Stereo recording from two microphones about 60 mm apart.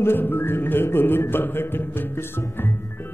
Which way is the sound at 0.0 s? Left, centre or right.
Left.